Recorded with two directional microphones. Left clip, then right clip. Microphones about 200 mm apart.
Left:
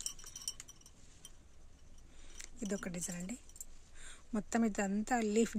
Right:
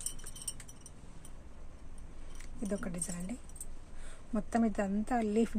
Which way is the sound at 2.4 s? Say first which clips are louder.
Right 3 dB; 40° left (ahead or behind).